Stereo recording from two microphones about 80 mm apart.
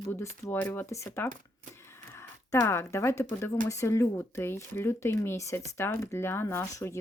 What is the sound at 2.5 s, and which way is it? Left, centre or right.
Speech, left.